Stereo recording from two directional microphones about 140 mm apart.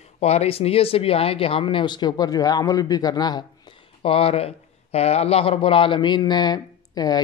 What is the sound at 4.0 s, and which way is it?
Speech, 40° left (ahead or behind).